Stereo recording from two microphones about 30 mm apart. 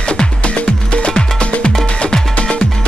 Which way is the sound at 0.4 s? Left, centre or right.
Left.